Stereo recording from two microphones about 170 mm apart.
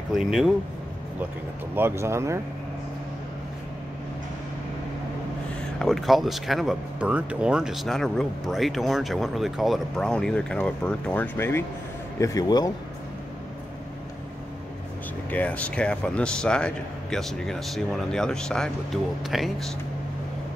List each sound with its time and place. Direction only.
0.1 s speech: 5° right (ahead or behind)
1.8 s speech: 15° right (ahead or behind)
5.8 s speech: centre (ahead or behind); by 12.7 s 20° left (ahead or behind)
15.3 s speech: 10° left (ahead or behind)